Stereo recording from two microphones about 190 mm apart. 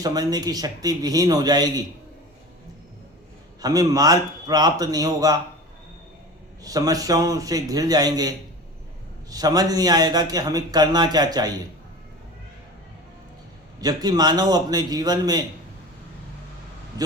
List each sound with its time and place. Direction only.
0.0 s a man's voice: 20° right (ahead or behind)
3.6 s a man's voice: 20° right (ahead or behind)
6.6 s a man's voice: 20° right (ahead or behind)
13.8 s a man's voice: 20° right (ahead or behind)